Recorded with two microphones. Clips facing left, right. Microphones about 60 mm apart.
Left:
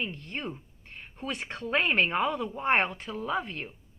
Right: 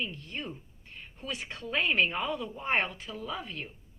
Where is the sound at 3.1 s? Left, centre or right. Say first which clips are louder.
Left 6 dB; left.